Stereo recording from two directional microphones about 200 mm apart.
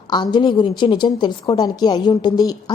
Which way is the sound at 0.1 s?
20° left (ahead or behind).